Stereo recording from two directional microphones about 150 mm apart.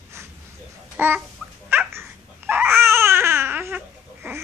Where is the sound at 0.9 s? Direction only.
10° right (ahead or behind).